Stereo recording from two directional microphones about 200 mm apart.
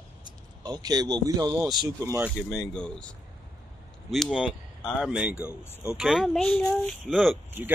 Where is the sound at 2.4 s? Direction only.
Centre (ahead or behind).